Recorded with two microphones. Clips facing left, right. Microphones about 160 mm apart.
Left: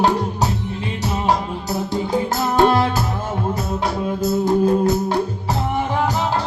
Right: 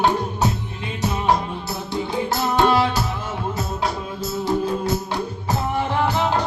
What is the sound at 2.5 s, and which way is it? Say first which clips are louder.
Music: left 2 dB; 45° left (ahead or behind).